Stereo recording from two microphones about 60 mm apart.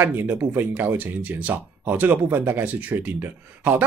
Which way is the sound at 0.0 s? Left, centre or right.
Right.